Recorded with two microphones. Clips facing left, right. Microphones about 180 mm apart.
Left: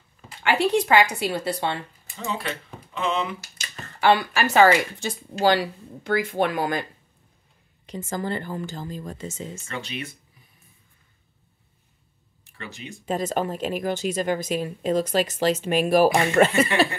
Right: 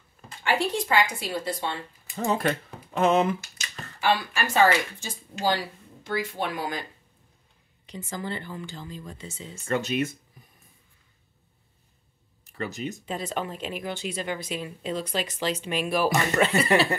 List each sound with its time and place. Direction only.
0.4 s a woman's voice: 70° left (ahead or behind)
2.1 s speech: 45° right (ahead or behind)
4.0 s a woman's voice: 70° left (ahead or behind)
5.4 s speech: 65° left (ahead or behind); by 9.7 s 45° left (ahead or behind)
9.7 s speech: 45° right (ahead or behind)
12.4 s speech: 40° right (ahead or behind)
13.0 s speech: 45° left (ahead or behind)